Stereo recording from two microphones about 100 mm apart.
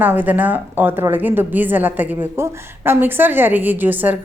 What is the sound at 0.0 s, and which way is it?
A woman's voice, 20° right (ahead or behind).